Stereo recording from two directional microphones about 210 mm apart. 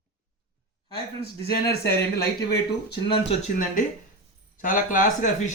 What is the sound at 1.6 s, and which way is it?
Speech, 50° left (ahead or behind).